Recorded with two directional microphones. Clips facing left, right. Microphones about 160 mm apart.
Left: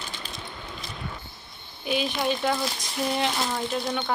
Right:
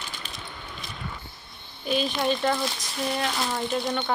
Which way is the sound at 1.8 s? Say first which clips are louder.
Right 1 dB; 10° left (ahead or behind).